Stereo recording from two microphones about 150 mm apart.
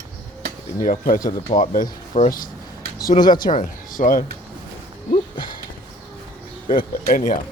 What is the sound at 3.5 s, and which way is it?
Speech, 55° left (ahead or behind).